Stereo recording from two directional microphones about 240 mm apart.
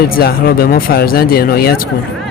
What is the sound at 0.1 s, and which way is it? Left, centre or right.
Speech, left.